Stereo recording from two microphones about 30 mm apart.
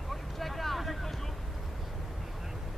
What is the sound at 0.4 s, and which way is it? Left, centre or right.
Vehicle, centre.